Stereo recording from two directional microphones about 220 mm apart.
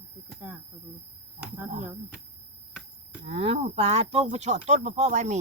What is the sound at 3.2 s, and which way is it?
Speech, 25° right (ahead or behind).